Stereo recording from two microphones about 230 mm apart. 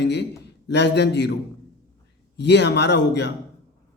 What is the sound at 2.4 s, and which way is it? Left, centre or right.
Speech, left.